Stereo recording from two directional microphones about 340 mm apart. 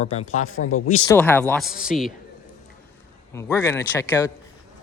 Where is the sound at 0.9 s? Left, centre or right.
Centre.